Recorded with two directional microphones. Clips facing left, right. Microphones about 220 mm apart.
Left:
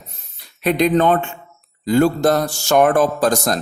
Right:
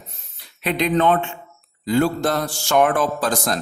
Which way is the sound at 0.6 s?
45° left (ahead or behind).